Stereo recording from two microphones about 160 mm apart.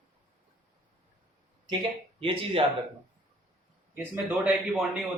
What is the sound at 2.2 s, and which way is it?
Speech, 35° right (ahead or behind).